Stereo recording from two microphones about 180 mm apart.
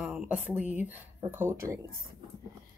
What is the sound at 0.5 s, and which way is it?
Speech, 10° right (ahead or behind).